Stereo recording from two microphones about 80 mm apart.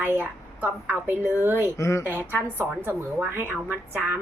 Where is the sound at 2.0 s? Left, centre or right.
Right.